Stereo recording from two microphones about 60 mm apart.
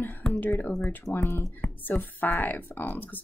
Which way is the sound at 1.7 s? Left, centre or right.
Left.